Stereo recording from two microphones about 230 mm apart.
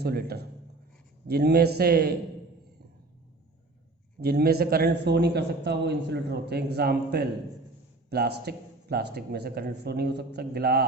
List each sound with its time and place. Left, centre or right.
0.0 s a man's voice: right
4.2 s a man's voice: right